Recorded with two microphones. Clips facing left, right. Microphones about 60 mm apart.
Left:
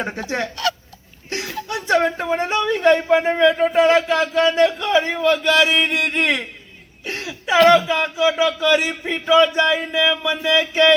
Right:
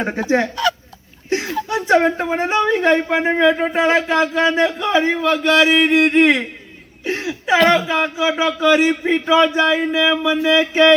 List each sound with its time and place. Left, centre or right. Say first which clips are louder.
0.0 s a woman's voice: right 6 dB; right
7.0 s a sound: right 6 dB; right
7.7 s a woman's voice: left 1 dB; centre